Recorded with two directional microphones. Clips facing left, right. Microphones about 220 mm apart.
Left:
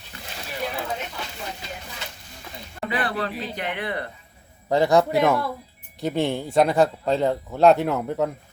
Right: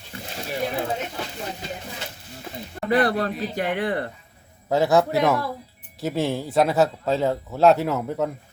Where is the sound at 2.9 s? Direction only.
40° right (ahead or behind).